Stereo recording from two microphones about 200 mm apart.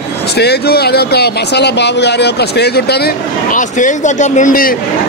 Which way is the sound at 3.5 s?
40° left (ahead or behind).